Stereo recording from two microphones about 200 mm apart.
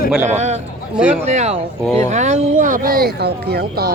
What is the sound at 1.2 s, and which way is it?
Speech, 35° right (ahead or behind).